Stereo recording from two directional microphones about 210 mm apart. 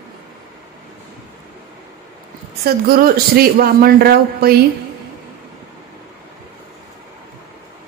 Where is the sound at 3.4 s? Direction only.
45° right (ahead or behind).